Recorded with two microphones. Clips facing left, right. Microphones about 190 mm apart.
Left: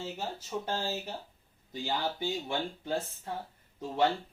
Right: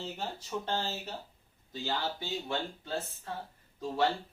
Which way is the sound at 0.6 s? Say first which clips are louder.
Left 1 dB; 10° left (ahead or behind).